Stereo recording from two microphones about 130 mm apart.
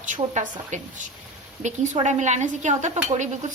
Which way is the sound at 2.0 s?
65° right (ahead or behind).